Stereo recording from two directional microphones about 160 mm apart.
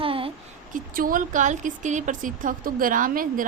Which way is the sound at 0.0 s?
35° right (ahead or behind).